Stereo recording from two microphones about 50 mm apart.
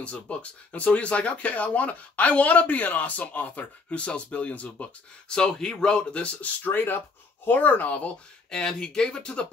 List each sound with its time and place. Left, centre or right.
0.0 s speech: left
5.3 s speech: centre
6.7 s speech: left
8.5 s speech: centre